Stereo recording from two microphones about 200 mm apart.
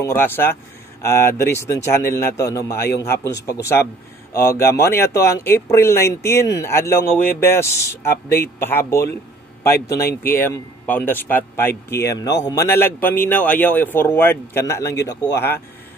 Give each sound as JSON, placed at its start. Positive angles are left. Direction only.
{"t": 0.0, "sound": "a man's voice", "side_deg": 10}